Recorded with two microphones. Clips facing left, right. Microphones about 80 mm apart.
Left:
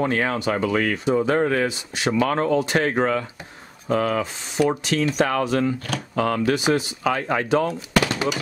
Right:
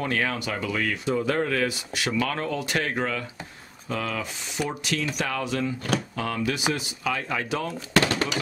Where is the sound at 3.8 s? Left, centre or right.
Left.